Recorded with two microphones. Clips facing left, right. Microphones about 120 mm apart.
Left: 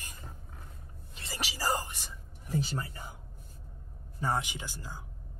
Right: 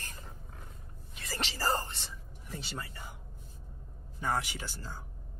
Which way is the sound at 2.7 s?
35° left (ahead or behind).